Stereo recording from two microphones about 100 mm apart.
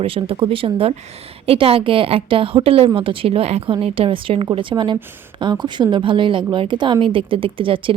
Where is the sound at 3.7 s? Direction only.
65° right (ahead or behind).